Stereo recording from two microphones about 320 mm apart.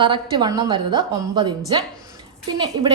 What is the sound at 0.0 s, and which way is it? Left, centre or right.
A woman's voice, centre.